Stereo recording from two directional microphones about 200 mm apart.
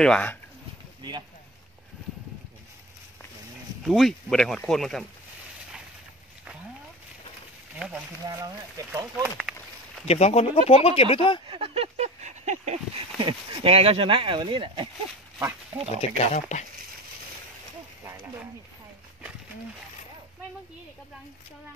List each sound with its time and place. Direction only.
0.0 s speech: 5° left (ahead or behind)
3.8 s speech: centre (ahead or behind)
8.3 s speech: 20° right (ahead or behind)
10.0 s speech: 35° left (ahead or behind)
11.4 s speech: 25° right (ahead or behind)
15.3 s pig: 15° right (ahead or behind)
16.2 s speech: 35° left (ahead or behind)